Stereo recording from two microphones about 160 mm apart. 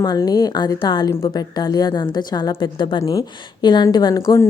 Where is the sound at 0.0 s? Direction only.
25° left (ahead or behind).